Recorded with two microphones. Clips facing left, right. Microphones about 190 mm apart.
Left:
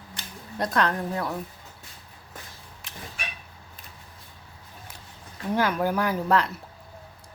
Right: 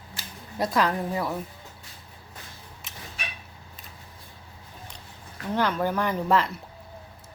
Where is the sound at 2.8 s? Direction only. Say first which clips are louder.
Left 3 dB; centre (ahead or behind).